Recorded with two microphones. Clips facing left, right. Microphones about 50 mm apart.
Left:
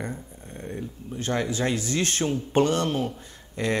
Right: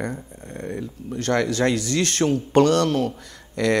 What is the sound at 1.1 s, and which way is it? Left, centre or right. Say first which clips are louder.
Speech: right 5 dB; right.